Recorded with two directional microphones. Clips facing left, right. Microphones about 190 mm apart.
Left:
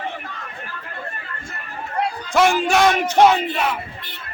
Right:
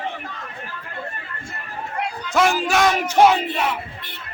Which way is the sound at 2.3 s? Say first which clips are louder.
Left 2 dB; centre (ahead or behind).